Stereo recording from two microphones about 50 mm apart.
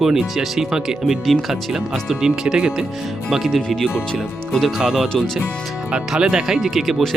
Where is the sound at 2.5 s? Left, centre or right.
Centre.